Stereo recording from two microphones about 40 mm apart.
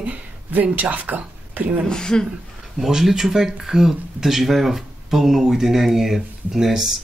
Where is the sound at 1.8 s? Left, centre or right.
Centre.